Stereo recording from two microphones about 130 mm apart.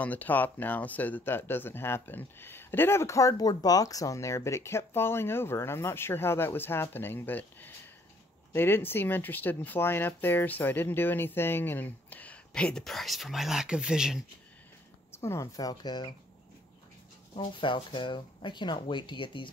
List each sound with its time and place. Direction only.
0.0 s speech: 15° left (ahead or behind); by 14.2 s 5° right (ahead or behind)
15.1 s speech: 20° left (ahead or behind)
17.4 s speech: 40° left (ahead or behind)